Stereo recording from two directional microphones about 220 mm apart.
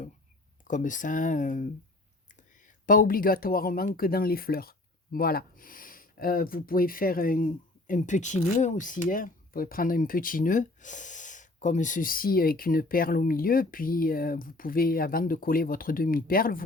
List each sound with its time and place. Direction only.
0.7 s speech: 35° left (ahead or behind)
2.8 s speech: 40° left (ahead or behind)